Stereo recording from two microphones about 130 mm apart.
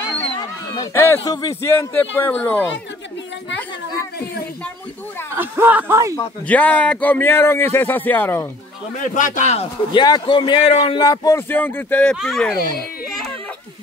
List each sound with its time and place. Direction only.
0.9 s a man's voice: 20° left (ahead or behind)
5.3 s speech: 15° right (ahead or behind)
6.4 s speech: 10° left (ahead or behind)
8.9 s a man's voice: 85° left; by 9.7 s 65° left (ahead or behind)
9.9 s a man's voice: 35° left (ahead or behind); by 12.5 s centre (ahead or behind)